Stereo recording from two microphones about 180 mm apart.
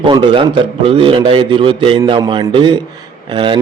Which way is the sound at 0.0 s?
25° right (ahead or behind).